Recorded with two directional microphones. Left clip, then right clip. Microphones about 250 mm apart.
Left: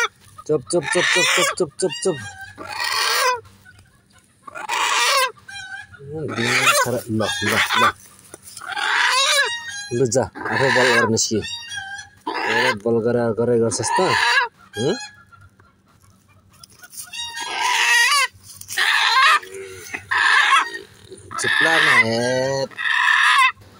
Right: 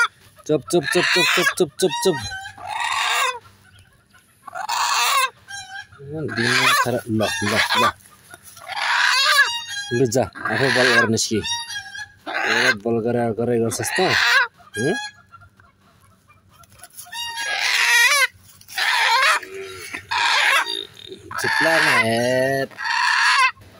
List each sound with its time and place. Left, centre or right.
0.4 s speech: centre
2.9 s fowl: centre
4.5 s a sound: centre
6.2 s speech: centre
7.5 s chicken: right
8.6 s pig: centre
9.9 s speech: centre
17.5 s a sound: centre
18.8 s goat: right
20.1 s dog: right
21.3 s sheep: right
22.0 s fowl: centre
22.7 s fowl: centre